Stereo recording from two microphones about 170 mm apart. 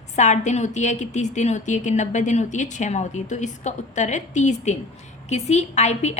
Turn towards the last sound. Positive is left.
turn(degrees=40)  # may be behind; listen again after turning